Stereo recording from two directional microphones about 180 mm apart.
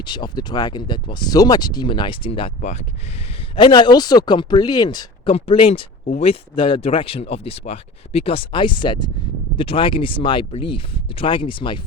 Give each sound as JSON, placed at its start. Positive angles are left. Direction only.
{"t": 0.0, "sound": "speech", "side_deg": 25}
{"t": 3.5, "sound": "speech", "side_deg": 25}